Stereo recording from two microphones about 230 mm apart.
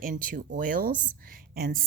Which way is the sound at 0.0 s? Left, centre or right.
Right.